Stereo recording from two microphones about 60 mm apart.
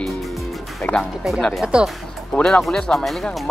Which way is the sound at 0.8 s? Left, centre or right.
Centre.